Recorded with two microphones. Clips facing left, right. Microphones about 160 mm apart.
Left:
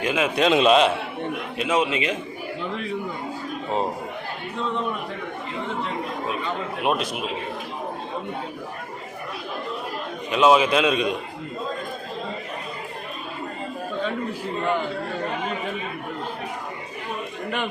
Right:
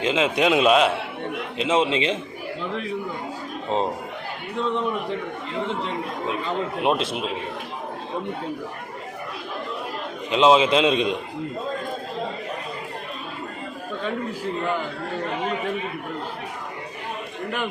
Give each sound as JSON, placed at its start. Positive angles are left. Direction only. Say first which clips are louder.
{"t": 0.0, "sound": "a man's voice", "louder": "right 1 dB", "side_deg": -25}
{"t": 0.4, "sound": "a man's voice", "louder": "left 1 dB", "side_deg": -5}
{"t": 1.5, "sound": "a man's voice", "louder": "right 2 dB", "side_deg": -25}
{"t": 6.8, "sound": "a man's voice", "louder": "right 1 dB", "side_deg": -25}
{"t": 10.3, "sound": "a man's voice", "louder": "right 1 dB", "side_deg": -25}